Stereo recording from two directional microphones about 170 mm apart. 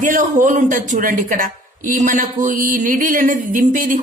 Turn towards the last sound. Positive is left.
turn(degrees=-50)  # may be behind; listen again after turning